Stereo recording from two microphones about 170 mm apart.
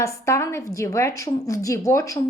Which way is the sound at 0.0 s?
15° left (ahead or behind).